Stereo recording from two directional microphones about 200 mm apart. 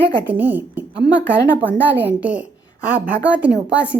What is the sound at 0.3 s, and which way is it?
Speech, 10° right (ahead or behind).